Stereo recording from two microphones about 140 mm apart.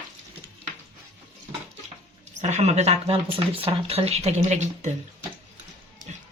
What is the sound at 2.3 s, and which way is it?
Speech, 55° right (ahead or behind).